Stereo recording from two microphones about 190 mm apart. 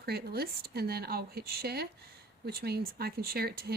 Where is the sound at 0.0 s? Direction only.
55° right (ahead or behind).